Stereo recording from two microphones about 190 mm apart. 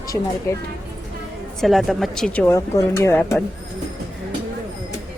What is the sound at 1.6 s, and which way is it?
A woman's voice, centre (ahead or behind).